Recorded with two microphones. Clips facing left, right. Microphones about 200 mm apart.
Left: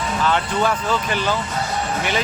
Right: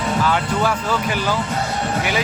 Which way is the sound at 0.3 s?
10° right (ahead or behind).